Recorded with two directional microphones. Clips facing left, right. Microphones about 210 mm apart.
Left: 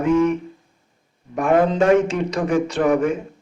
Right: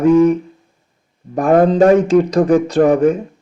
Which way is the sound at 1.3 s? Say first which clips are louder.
Right 6 dB; 35° right (ahead or behind).